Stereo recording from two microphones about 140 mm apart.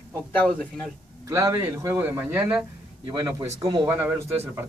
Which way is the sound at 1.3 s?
25° right (ahead or behind).